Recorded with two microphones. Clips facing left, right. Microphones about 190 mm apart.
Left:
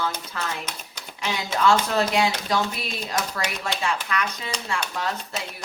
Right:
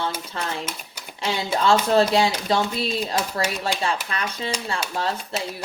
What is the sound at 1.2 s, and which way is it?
Speech, 30° right (ahead or behind).